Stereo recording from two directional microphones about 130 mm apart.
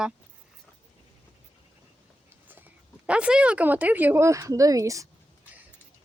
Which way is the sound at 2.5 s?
10° right (ahead or behind).